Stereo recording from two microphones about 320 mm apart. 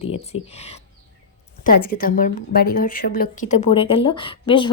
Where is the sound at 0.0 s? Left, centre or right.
Centre.